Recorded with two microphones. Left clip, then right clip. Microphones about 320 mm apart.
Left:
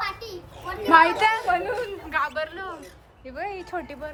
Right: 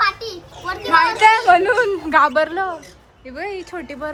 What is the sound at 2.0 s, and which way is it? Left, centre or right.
Speech, centre.